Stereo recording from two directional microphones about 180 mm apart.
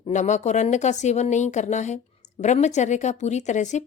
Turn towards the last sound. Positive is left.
turn(degrees=40)  # may be behind; listen again after turning